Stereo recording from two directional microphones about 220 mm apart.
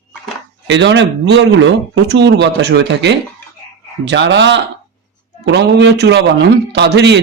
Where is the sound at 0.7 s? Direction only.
55° right (ahead or behind).